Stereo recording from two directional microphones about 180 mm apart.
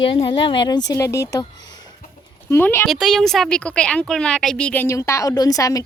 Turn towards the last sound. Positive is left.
turn(degrees=20)  # may be behind; listen again after turning